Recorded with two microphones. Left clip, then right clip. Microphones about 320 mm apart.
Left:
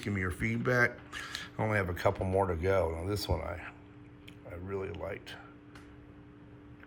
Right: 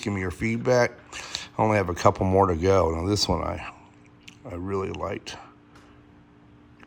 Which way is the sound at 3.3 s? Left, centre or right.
Right.